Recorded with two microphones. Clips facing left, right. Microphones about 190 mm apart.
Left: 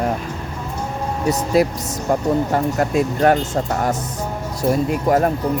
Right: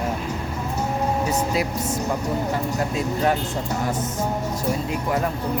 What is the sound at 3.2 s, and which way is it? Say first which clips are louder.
Speech: left 6 dB; 55° left (ahead or behind).